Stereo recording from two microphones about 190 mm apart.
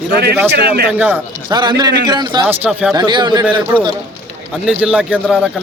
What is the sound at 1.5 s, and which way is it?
Speech, 20° right (ahead or behind).